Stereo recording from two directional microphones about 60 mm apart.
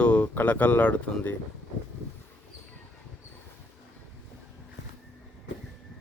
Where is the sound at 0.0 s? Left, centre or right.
Centre.